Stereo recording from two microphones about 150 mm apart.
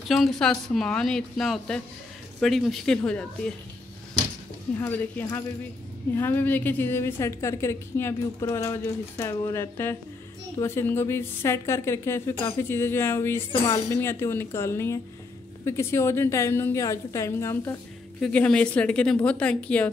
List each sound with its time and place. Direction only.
0.1 s speech: centre (ahead or behind)
4.7 s a woman's voice: 15° left (ahead or behind)
18.2 s a woman's voice: 5° left (ahead or behind)